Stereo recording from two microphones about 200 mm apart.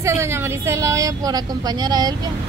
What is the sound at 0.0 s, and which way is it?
Speech, 15° right (ahead or behind).